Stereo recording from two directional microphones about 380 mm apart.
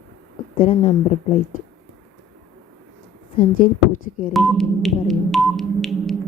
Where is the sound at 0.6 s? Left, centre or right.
Centre.